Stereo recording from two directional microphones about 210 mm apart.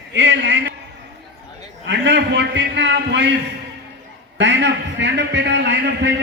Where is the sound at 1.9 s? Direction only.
55° right (ahead or behind).